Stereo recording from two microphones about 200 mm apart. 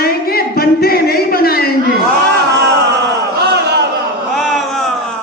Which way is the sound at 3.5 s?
55° right (ahead or behind).